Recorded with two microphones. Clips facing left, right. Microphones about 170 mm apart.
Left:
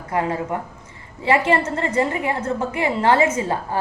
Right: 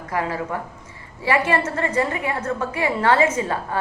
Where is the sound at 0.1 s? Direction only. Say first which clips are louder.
Left 2 dB; 25° left (ahead or behind).